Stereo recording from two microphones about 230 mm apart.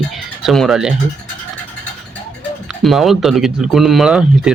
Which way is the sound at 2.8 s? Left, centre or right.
Centre.